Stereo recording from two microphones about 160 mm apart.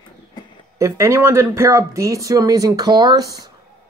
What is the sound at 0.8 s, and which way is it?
Speech, 20° right (ahead or behind).